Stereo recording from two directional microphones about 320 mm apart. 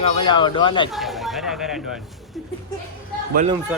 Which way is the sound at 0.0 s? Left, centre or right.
Centre.